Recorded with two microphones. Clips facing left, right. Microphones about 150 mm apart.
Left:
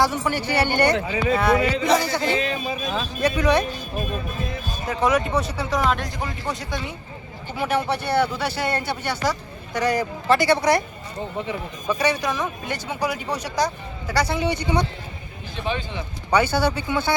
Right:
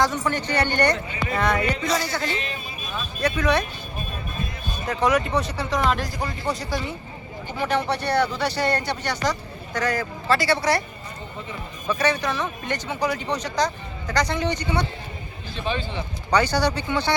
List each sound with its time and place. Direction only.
0.0 s speech: 10° left (ahead or behind)
2.8 s speech: 90° left
3.2 s speech: 10° left (ahead or behind)
4.9 s speech: centre (ahead or behind)
11.9 s speech: 10° left (ahead or behind)